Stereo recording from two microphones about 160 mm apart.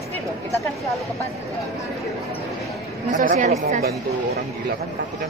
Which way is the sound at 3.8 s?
80° right.